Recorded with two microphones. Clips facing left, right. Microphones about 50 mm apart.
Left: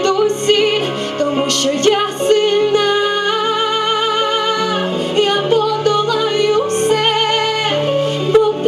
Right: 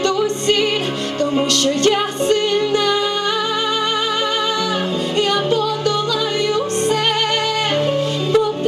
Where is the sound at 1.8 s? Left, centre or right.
Left.